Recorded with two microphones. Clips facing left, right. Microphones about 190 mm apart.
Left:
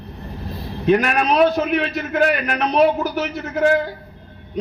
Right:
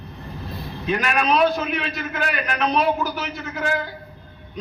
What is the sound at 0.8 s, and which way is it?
A man's voice, 50° left (ahead or behind).